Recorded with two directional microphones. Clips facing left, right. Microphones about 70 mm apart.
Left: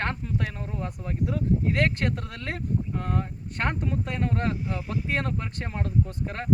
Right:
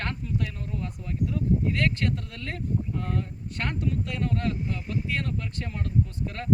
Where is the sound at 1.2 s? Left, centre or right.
Left.